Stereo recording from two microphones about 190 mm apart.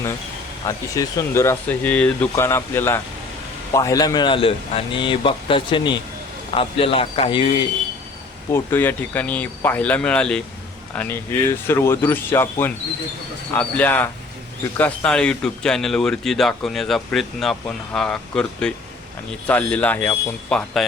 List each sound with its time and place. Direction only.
0.6 s a man's voice: 20° left (ahead or behind)
8.5 s speech: 10° left (ahead or behind)